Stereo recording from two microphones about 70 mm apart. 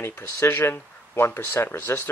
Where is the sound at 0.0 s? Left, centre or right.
Left.